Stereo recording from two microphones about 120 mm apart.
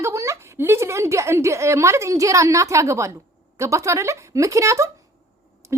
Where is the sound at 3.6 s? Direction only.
25° right (ahead or behind).